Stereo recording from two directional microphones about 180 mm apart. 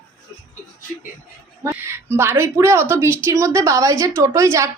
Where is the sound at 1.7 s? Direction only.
15° right (ahead or behind).